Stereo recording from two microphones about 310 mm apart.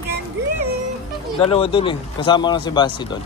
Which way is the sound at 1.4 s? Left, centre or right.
Centre.